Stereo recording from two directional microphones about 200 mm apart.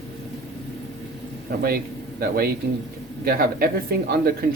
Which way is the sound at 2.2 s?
50° right (ahead or behind).